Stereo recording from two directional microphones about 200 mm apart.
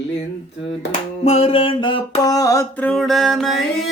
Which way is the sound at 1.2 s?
30° left (ahead or behind).